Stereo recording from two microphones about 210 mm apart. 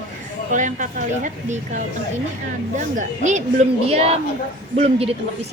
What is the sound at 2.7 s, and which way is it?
A woman's voice, 35° right (ahead or behind).